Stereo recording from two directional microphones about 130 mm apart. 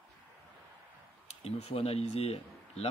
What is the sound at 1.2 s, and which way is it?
Speech, 55° left (ahead or behind).